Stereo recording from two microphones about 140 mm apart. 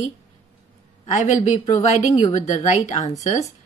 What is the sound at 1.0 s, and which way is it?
Speech, 60° left (ahead or behind).